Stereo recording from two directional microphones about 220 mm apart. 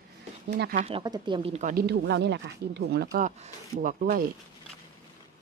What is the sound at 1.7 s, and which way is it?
Speech, 50° right (ahead or behind).